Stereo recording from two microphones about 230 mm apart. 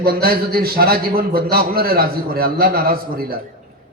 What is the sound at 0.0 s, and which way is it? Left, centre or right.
A man's voice, right.